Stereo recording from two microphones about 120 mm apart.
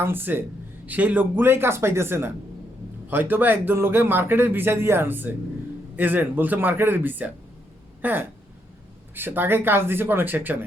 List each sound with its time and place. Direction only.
0.0 s speech: 15° right (ahead or behind)